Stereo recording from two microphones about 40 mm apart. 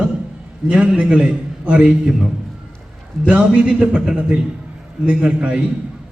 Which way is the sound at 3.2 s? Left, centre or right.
Right.